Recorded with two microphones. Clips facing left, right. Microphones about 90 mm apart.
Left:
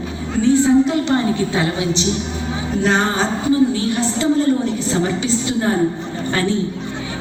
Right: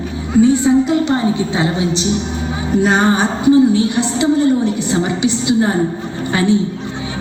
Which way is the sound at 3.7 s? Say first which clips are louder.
Right 4 dB; 15° right (ahead or behind).